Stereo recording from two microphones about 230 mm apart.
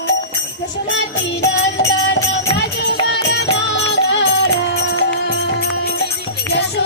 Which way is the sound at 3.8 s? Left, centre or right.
Left.